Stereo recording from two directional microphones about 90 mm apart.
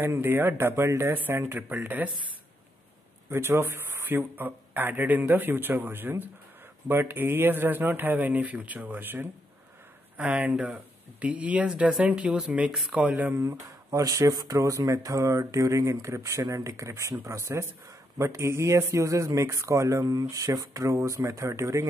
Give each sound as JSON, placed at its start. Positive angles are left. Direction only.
{"t": 0.0, "sound": "speech", "side_deg": -25}
{"t": 3.3, "sound": "speech", "side_deg": -25}
{"t": 13.4, "sound": "speech", "side_deg": -35}